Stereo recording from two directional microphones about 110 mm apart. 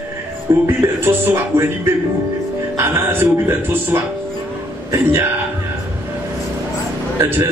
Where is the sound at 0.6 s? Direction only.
20° right (ahead or behind).